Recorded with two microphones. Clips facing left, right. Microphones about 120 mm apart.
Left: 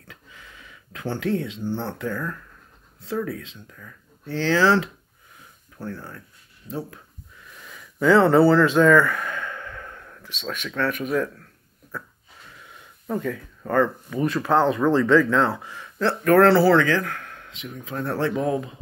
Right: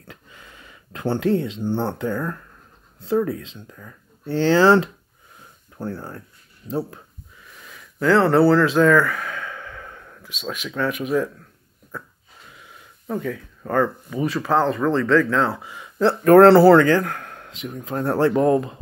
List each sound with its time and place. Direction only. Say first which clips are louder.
0.0 s a sound: right 3 dB; 35° right (ahead or behind)
1.6 s speech: right 4 dB; 25° right (ahead or behind)
5.8 s speech: right 4 dB; 30° right (ahead or behind)
7.4 s speech: left 1 dB; centre (ahead or behind)
12.5 s speech: even; centre (ahead or behind)
16.0 s speech: right 5 dB; 30° right (ahead or behind)
16.4 s speech: right 5 dB; 55° right (ahead or behind); by 18.3 s 40° right (ahead or behind)